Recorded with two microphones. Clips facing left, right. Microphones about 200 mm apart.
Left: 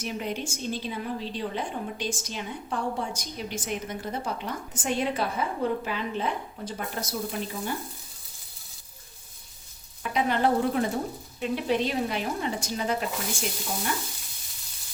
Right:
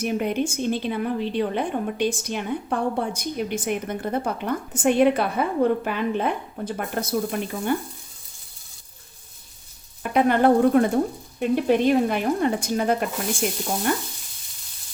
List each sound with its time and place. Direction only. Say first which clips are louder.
0.0 s a woman's voice: right 8 dB; 55° right (ahead or behind)
10.0 s a woman's voice: right 6 dB; 55° right (ahead or behind)